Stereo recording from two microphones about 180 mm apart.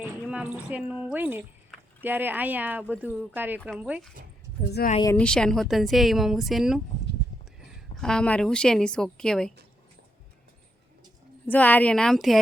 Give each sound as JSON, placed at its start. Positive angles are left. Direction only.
{"t": 0.0, "sound": "speech", "side_deg": -5}
{"t": 4.8, "sound": "speech", "side_deg": 60}
{"t": 5.1, "sound": "speech", "side_deg": 5}
{"t": 8.0, "sound": "speech", "side_deg": 5}
{"t": 11.4, "sound": "speech", "side_deg": 10}